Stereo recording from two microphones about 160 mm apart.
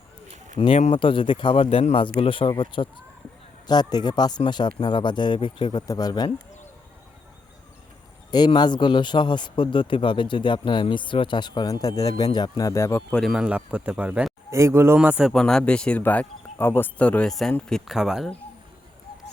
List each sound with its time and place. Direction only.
0.9 s speech: 30° left (ahead or behind)
8.3 s speech: 25° left (ahead or behind)
13.1 s a man's voice: centre (ahead or behind)